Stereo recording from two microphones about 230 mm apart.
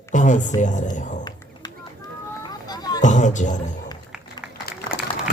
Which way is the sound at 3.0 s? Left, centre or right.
Left.